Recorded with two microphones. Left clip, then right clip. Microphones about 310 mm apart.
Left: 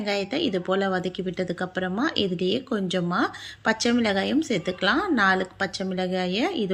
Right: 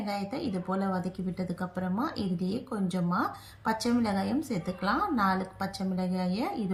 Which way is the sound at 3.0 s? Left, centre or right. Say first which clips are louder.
Left 5 dB; centre.